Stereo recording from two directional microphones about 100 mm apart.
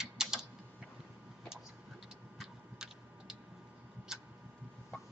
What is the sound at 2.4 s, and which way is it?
Tick-tock, 5° right (ahead or behind).